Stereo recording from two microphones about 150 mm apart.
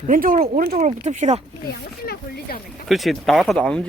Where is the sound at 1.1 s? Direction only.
50° right (ahead or behind).